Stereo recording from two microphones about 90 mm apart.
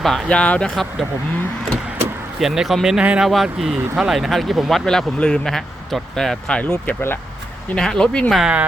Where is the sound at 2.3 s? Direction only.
5° right (ahead or behind); by 7.2 s 25° left (ahead or behind).